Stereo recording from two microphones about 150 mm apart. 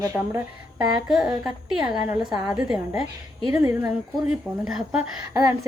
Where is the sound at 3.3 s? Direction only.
25° right (ahead or behind).